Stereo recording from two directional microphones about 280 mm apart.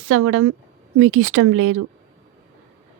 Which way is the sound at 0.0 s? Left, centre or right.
Right.